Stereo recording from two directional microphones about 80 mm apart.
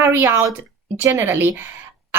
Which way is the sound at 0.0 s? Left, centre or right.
Right.